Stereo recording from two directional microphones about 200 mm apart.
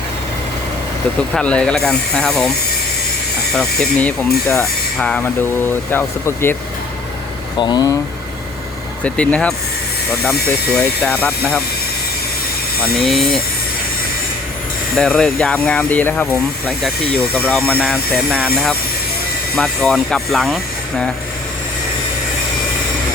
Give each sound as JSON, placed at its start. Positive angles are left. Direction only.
{"t": 1.3, "sound": "speech", "side_deg": 5}
{"t": 3.5, "sound": "speech", "side_deg": 5}
{"t": 7.6, "sound": "speech", "side_deg": 20}
{"t": 9.0, "sound": "speech", "side_deg": 5}
{"t": 10.8, "sound": "speech", "side_deg": 5}
{"t": 12.8, "sound": "speech", "side_deg": 0}
{"t": 14.9, "sound": "speech", "side_deg": 5}
{"t": 18.3, "sound": "speech", "side_deg": -10}